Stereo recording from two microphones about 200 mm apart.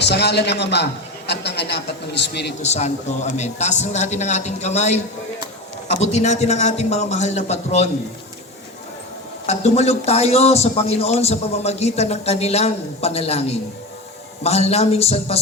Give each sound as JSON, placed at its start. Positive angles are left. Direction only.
{"t": 0.0, "sound": "a man's voice", "side_deg": 55}
{"t": 2.6, "sound": "a man's voice", "side_deg": 35}
{"t": 6.1, "sound": "a man's voice", "side_deg": 35}
{"t": 9.5, "sound": "a man's voice", "side_deg": 35}